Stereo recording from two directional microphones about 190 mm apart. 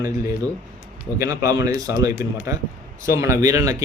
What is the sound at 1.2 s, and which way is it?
Speech, 15° right (ahead or behind).